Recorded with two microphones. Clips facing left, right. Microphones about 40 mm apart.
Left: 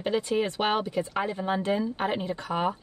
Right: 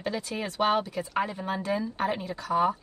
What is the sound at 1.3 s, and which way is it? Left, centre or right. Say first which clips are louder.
A woman's voice: left 3 dB; left.